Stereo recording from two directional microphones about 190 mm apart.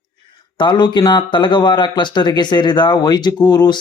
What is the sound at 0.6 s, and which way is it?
Speech, 25° left (ahead or behind).